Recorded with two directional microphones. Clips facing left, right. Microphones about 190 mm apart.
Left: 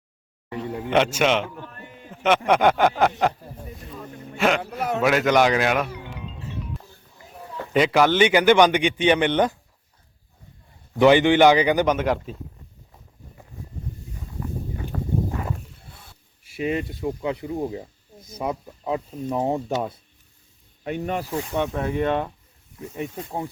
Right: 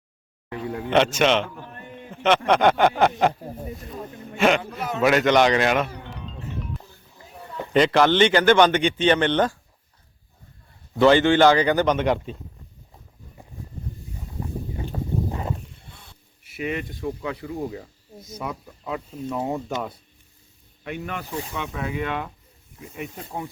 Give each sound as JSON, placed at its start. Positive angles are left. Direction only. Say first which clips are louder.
{"t": 0.5, "sound": "a man's voice", "louder": "right 1 dB", "side_deg": 5}
{"t": 4.4, "sound": "a man's voice", "louder": "right 2 dB", "side_deg": 0}
{"t": 7.3, "sound": "a sound", "louder": "left 1 dB", "side_deg": 0}
{"t": 7.7, "sound": "a man's voice", "louder": "right 1 dB", "side_deg": 5}
{"t": 10.9, "sound": "a man's voice", "louder": "left 1 dB", "side_deg": 15}
{"t": 15.3, "sound": "a sound", "louder": "even", "side_deg": -25}
{"t": 16.5, "sound": "speech", "louder": "left 3 dB", "side_deg": 30}
{"t": 21.5, "sound": "speech", "louder": "left 7 dB", "side_deg": 45}
{"t": 22.0, "sound": "speech", "louder": "left 6 dB", "side_deg": 35}